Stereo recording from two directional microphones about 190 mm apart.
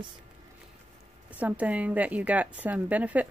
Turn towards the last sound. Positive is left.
turn(degrees=-10)  # may be behind; listen again after turning